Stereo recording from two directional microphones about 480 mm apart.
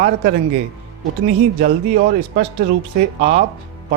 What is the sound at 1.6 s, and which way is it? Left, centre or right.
Speech, centre.